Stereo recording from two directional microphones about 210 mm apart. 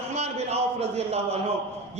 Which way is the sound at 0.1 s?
30° right (ahead or behind).